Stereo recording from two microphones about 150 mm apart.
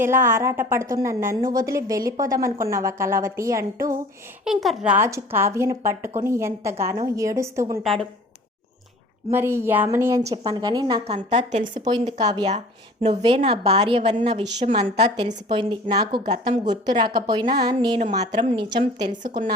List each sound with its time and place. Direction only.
0.0 s a woman's voice: 15° right (ahead or behind)
4.4 s speech: centre (ahead or behind)
5.0 s a woman's voice: 15° right (ahead or behind)
9.3 s a woman's voice: 15° right (ahead or behind)
11.0 s a woman's voice: 45° right (ahead or behind)
12.2 s a woman's voice: 25° right (ahead or behind)
12.5 s a woman's voice: 45° right (ahead or behind)
15.4 s a woman's voice: 30° right (ahead or behind)